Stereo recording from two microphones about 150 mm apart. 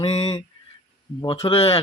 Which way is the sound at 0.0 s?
40° left (ahead or behind).